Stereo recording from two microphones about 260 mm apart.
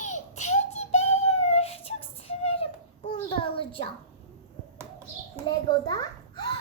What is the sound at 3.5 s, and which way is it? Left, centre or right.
Speech, centre.